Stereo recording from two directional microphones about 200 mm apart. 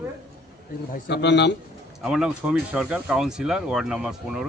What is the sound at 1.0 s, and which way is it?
Speech, 60° left (ahead or behind).